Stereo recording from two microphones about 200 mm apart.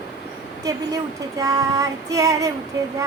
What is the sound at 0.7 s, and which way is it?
A woman's voice, 20° right (ahead or behind).